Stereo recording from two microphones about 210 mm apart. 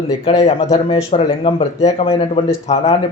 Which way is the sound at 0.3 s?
30° left (ahead or behind).